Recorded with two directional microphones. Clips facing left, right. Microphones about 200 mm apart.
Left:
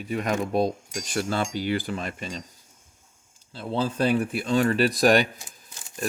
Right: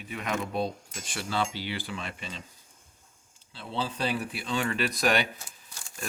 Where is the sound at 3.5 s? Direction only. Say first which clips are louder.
Left 7 dB; 45° left (ahead or behind).